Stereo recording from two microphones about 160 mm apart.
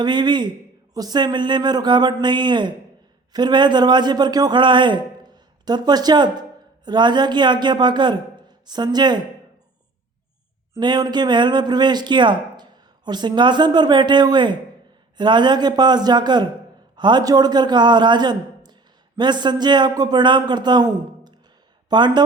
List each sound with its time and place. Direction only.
0.0 s a man's voice: 30° right (ahead or behind)
10.8 s a man's voice: 25° right (ahead or behind)